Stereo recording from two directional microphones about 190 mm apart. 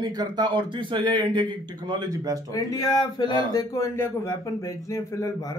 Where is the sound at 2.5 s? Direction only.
20° left (ahead or behind).